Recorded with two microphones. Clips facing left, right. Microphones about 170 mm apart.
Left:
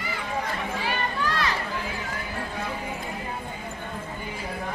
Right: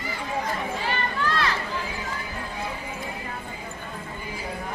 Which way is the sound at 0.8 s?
15° left (ahead or behind).